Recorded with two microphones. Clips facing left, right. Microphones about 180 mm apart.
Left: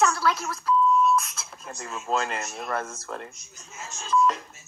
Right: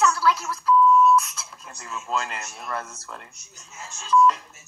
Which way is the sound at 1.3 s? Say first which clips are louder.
Left 3 dB; 45° left (ahead or behind).